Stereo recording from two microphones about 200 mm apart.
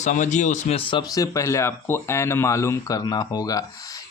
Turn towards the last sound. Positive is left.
turn(degrees=15)  # may be behind; listen again after turning